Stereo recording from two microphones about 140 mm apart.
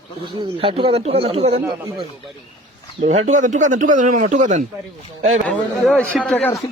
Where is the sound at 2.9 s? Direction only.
55° right (ahead or behind).